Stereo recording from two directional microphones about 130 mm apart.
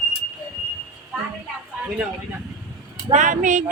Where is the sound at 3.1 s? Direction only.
80° right.